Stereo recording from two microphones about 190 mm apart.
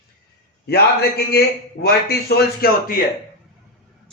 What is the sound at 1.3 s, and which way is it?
A man's voice, 55° left (ahead or behind).